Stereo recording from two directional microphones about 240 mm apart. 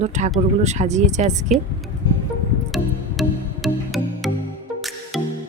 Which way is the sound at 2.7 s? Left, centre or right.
Centre.